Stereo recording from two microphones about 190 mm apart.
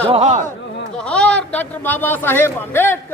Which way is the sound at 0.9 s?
5° left (ahead or behind).